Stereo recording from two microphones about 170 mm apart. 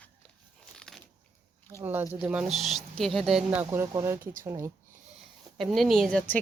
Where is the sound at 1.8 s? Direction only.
15° right (ahead or behind).